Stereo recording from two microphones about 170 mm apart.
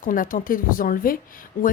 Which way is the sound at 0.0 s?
55° left (ahead or behind).